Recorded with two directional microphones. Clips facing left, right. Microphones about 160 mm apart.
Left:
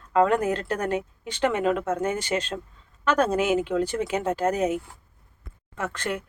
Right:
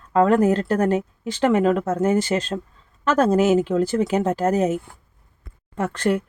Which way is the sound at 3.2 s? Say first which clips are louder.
Right 7 dB; 35° right (ahead or behind).